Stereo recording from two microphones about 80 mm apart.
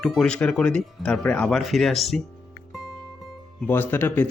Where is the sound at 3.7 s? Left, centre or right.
Left.